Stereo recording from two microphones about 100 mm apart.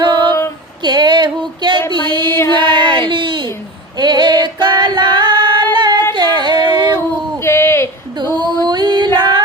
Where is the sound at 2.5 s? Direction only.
50° right (ahead or behind).